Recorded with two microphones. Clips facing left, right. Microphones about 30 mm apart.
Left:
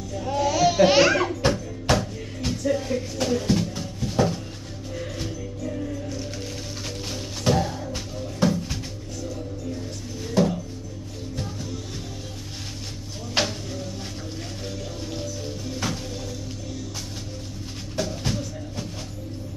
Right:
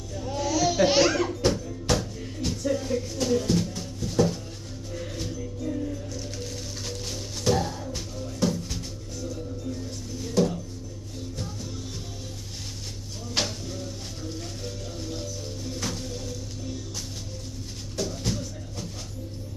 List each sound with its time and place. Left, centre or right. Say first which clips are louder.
0.3 s a sound: left 4 dB; left
7.1 s music: left 2 dB; left
10.4 s music: left 2 dB; centre
13.3 s a sound: left 4 dB; centre
15.8 s music: left 4 dB; centre
17.9 s music: left 2 dB; left